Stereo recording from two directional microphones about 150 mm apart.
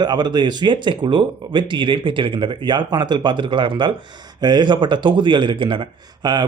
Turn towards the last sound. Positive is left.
turn(degrees=-30)  # may be behind; listen again after turning